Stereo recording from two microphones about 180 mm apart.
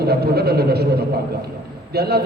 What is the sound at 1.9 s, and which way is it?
Speech, 60° right (ahead or behind).